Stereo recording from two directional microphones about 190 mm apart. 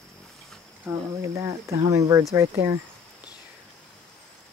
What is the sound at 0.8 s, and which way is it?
Speech, 15° right (ahead or behind).